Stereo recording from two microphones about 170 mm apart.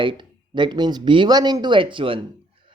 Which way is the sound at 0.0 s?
30° right (ahead or behind).